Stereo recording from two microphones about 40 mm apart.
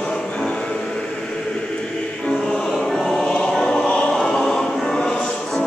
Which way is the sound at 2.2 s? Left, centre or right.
Centre.